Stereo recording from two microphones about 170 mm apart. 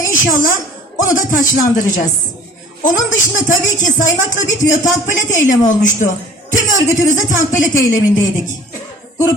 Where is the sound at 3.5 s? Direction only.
50° left (ahead or behind).